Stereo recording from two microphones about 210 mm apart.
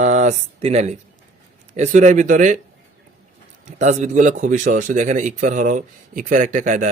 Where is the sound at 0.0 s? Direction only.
35° right (ahead or behind).